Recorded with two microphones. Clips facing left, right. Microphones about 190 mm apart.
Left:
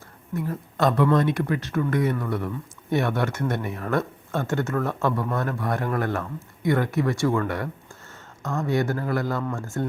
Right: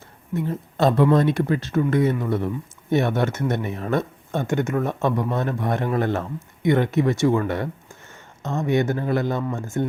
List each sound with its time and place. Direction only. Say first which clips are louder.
0.3 s speech: right 3 dB; 25° right (ahead or behind)